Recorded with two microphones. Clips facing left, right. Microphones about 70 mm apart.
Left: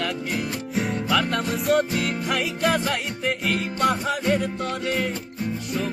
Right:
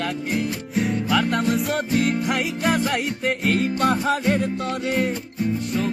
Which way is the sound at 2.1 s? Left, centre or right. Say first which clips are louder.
Right 3 dB; right.